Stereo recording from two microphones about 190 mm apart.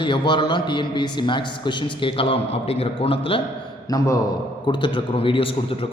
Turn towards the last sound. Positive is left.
turn(degrees=25)  # may be behind; listen again after turning